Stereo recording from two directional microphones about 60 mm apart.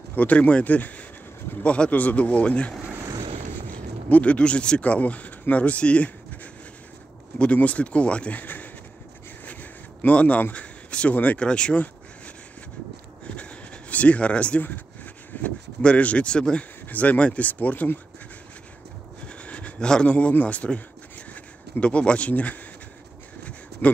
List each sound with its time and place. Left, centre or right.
0.1 s speech: left
3.7 s speech: left
9.5 s a sound: left
10.5 s speech: centre
13.2 s a sound: left
15.4 s speech: left
19.2 s a man's voice: left
23.8 s speech: left